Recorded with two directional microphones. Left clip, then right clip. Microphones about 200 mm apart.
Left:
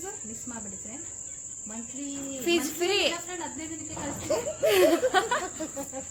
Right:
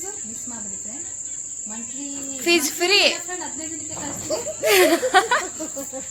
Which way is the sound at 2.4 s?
20° right (ahead or behind).